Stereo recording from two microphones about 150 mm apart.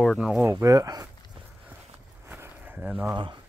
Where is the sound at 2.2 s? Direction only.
15° right (ahead or behind).